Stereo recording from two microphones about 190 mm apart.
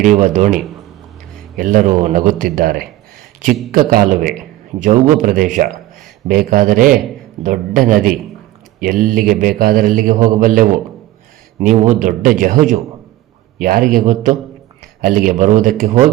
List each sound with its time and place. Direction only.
0.0 s a man's voice: 40° right (ahead or behind)